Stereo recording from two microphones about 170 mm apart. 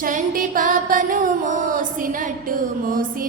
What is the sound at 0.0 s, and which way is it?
Music, 55° right (ahead or behind).